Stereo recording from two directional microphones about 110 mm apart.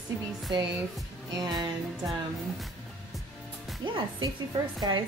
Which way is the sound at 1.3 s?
35° right (ahead or behind).